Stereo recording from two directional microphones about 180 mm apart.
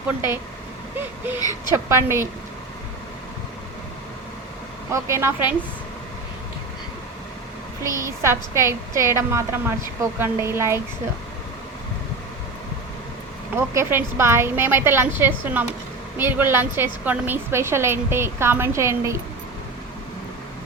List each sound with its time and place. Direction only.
1.4 s a woman's voice: 20° left (ahead or behind)
1.7 s a woman's voice: 15° right (ahead or behind)
4.9 s a woman's voice: 15° right (ahead or behind)
7.9 s a woman's voice: 15° right (ahead or behind)
13.6 s a woman's voice: 15° right (ahead or behind)